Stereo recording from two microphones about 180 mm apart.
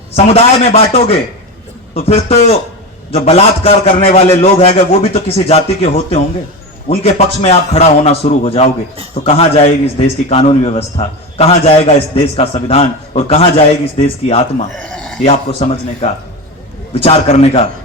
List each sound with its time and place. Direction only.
0.1 s a man's voice: 35° left (ahead or behind)
14.8 s a sound: centre (ahead or behind)
15.2 s a man's voice: 35° left (ahead or behind)